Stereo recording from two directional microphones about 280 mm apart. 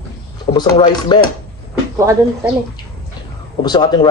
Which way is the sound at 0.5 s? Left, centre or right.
Centre.